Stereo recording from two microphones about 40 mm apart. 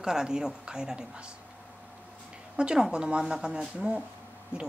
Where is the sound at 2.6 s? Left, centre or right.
Right.